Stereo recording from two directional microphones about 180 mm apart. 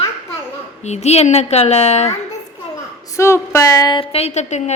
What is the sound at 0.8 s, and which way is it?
A woman's voice, 40° left (ahead or behind).